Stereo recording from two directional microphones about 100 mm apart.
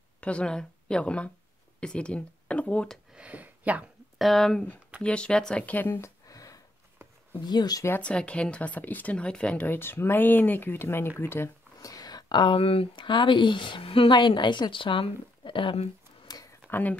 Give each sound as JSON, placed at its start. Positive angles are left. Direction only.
{"t": 0.2, "sound": "speech", "side_deg": 10}
{"t": 3.2, "sound": "speech", "side_deg": -15}
{"t": 4.2, "sound": "speech", "side_deg": 0}
{"t": 8.0, "sound": "speech", "side_deg": 10}
{"t": 11.8, "sound": "speech", "side_deg": 40}